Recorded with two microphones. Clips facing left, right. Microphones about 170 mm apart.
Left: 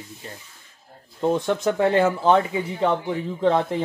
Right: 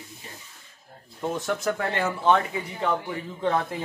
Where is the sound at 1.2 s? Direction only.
25° left (ahead or behind).